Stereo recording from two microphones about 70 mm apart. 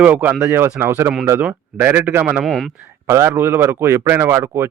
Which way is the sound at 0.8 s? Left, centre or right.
Right.